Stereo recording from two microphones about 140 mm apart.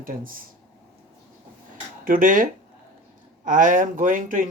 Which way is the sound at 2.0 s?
80° right.